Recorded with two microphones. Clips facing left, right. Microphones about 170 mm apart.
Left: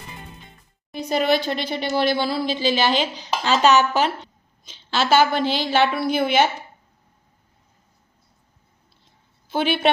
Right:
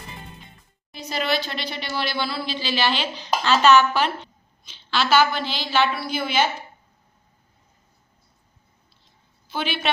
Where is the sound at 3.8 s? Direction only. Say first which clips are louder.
Left 1 dB; 45° left (ahead or behind); by 6.5 s 60° left (ahead or behind).